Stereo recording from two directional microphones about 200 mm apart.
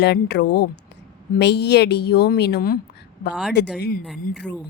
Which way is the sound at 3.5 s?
55° left (ahead or behind).